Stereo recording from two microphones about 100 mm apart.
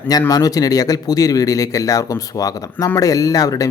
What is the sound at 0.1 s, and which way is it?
Speech, 40° left (ahead or behind).